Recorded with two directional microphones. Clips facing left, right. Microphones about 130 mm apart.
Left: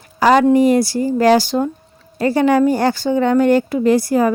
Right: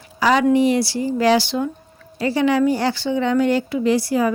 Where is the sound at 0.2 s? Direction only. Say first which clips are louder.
Left 4 dB; 45° left (ahead or behind).